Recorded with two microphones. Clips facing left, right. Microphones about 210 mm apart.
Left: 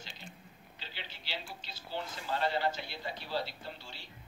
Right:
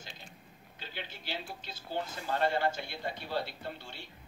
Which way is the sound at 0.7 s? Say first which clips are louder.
Right 5 dB; 50° right (ahead or behind).